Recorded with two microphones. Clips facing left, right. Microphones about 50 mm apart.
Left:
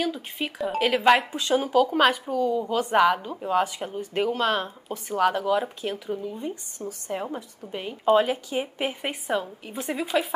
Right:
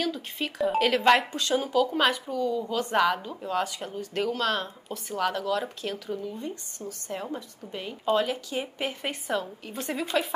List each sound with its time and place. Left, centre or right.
0.0 s speech: centre